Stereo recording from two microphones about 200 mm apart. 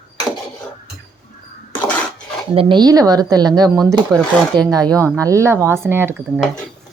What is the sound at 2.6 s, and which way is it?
A woman's voice, 25° right (ahead or behind).